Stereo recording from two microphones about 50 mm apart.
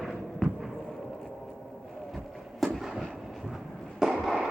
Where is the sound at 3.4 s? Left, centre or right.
Centre.